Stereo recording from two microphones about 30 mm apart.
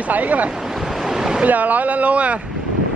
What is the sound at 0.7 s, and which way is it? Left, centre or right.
Waves, centre.